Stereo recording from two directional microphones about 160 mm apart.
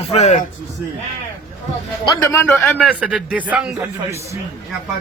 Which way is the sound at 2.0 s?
20° left (ahead or behind).